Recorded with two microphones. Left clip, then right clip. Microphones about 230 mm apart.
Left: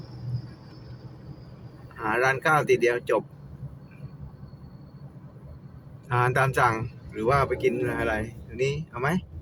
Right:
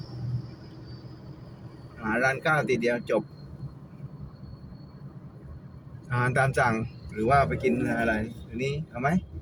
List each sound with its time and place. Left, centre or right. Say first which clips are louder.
2.0 s speech: left 2 dB; centre
6.1 s speech: left 2 dB; centre